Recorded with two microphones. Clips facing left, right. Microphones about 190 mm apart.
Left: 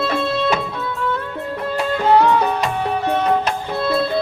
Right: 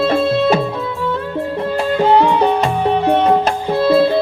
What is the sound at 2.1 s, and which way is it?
Music, 25° right (ahead or behind).